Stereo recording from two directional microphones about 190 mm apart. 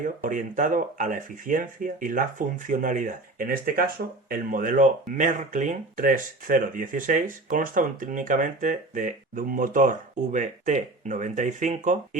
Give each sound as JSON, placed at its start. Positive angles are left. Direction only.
{"t": 0.3, "sound": "speech", "side_deg": -45}